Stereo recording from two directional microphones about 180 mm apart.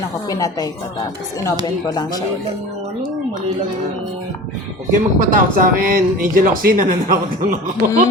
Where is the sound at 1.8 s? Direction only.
20° left (ahead or behind).